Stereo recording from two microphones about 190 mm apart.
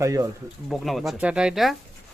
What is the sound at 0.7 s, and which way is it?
Speech, centre (ahead or behind).